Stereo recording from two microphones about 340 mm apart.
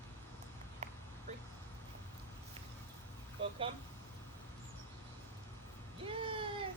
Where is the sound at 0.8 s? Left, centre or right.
Centre.